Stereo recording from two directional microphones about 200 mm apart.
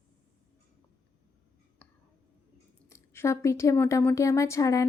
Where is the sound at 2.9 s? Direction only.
15° left (ahead or behind).